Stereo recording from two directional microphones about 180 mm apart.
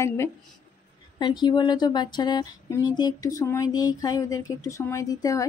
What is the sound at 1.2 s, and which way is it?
Speech, 25° left (ahead or behind).